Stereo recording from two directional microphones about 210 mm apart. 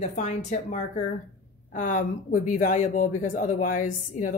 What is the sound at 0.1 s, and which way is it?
Speech, 35° left (ahead or behind).